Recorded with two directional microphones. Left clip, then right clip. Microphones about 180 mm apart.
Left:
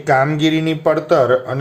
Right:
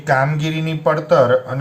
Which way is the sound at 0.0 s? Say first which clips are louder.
Left 3 dB; 30° left (ahead or behind).